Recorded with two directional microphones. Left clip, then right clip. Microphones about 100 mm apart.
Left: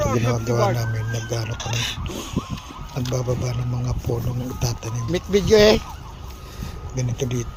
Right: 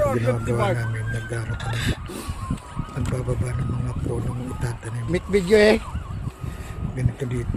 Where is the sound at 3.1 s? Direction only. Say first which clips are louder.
Left 5 dB; 10° left (ahead or behind).